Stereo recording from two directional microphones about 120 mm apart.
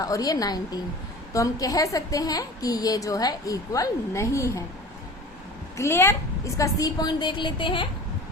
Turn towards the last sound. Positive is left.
turn(degrees=45)  # may be behind; listen again after turning